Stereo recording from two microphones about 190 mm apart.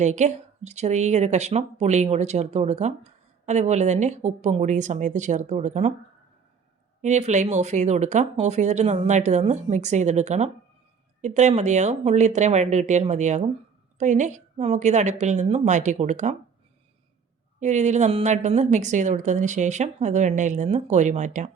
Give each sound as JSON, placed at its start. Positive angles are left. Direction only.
{"t": 0.0, "sound": "speech", "side_deg": -40}
{"t": 7.0, "sound": "speech", "side_deg": -40}
{"t": 17.6, "sound": "speech", "side_deg": -40}